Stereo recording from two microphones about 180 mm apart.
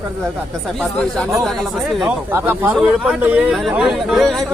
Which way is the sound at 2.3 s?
10° right (ahead or behind).